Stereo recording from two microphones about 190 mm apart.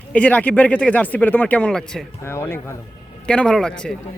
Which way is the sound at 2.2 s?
15° left (ahead or behind).